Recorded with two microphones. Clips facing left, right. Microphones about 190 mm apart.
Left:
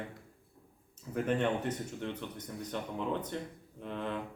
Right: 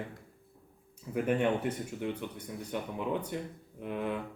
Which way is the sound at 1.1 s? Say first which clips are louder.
Right 2 dB; 10° right (ahead or behind).